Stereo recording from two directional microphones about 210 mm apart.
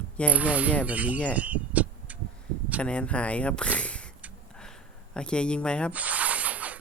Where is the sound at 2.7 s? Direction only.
5° left (ahead or behind).